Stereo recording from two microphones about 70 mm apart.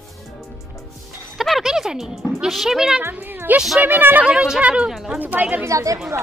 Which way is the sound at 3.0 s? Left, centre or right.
Right.